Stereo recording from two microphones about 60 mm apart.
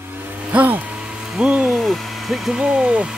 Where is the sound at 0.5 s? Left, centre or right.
Right.